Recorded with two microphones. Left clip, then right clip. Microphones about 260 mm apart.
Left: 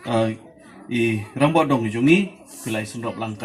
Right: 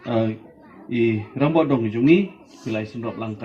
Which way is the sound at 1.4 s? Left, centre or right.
Left.